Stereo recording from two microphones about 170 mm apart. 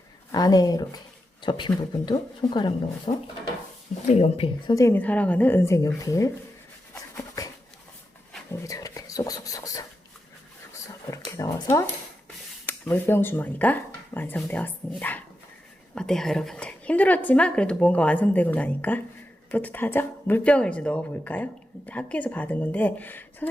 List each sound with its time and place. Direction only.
0.3 s speech: 25° left (ahead or behind)
3.1 s speech: 40° left (ahead or behind)
4.6 s speech: 20° left (ahead or behind)
8.6 s whispering: 20° left (ahead or behind)
11.4 s a sound: 25° left (ahead or behind)
12.6 s speech: 10° left (ahead or behind)